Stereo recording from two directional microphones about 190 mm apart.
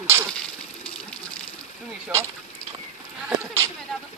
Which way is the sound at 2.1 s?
10° right (ahead or behind).